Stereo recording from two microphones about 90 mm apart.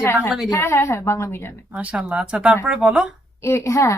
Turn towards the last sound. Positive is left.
turn(degrees=35)  # may be behind; listen again after turning